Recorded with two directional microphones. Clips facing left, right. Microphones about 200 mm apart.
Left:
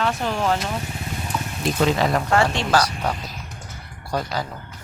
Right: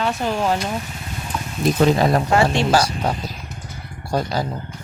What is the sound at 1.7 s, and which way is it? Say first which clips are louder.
Speech: right 3 dB; 40° right (ahead or behind).